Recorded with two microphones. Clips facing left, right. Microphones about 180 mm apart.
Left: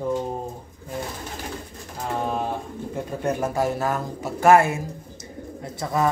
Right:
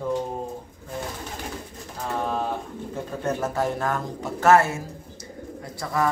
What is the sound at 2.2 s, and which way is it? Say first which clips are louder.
Speech: even; 15° left (ahead or behind).